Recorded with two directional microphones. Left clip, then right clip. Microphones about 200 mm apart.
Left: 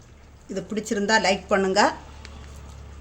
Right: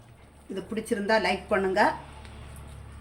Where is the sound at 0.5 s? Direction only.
50° left (ahead or behind).